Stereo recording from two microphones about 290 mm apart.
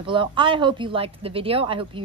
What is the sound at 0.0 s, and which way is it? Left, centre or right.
Speech, centre.